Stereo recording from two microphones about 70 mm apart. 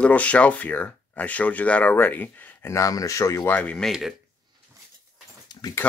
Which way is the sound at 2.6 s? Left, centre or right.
Left.